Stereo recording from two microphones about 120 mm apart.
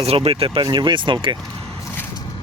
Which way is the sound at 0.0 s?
55° right (ahead or behind).